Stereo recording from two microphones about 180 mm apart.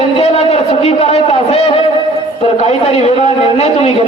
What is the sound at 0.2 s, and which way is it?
A man's voice, 35° left (ahead or behind).